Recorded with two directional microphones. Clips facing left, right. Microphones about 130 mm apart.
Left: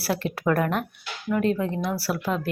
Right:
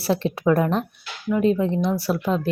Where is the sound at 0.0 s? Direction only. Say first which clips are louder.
Right 4 dB; 25° right (ahead or behind).